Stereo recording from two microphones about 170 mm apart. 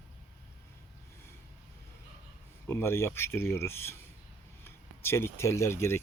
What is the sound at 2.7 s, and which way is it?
Speech, 15° left (ahead or behind).